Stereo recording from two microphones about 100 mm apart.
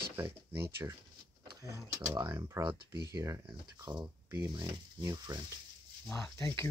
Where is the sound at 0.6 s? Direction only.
25° right (ahead or behind).